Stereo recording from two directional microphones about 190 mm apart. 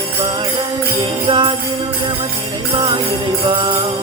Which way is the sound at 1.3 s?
25° right (ahead or behind).